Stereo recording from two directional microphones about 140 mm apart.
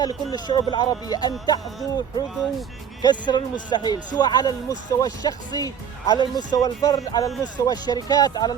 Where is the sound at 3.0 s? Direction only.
30° left (ahead or behind).